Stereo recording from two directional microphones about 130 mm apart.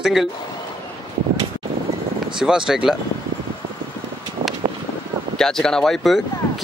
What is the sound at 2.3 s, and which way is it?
Speech, 5° right (ahead or behind).